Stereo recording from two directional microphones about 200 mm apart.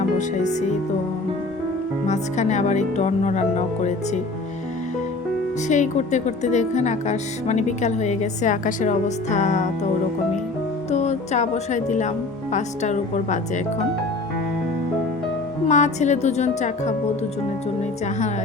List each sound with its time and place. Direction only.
0.2 s speech: 35° left (ahead or behind)
2.0 s speech: 35° left (ahead or behind)
5.6 s speech: 35° left (ahead or behind)
10.9 s speech: 35° left (ahead or behind)
15.6 s speech: 35° left (ahead or behind)